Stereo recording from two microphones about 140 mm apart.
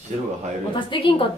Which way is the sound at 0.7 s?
35° left (ahead or behind).